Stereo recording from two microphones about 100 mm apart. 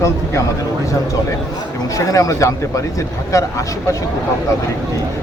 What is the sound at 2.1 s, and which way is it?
Speech, 30° left (ahead or behind).